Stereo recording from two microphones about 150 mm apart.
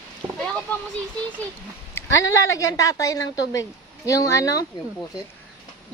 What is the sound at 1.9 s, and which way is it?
A woman's voice, 20° left (ahead or behind).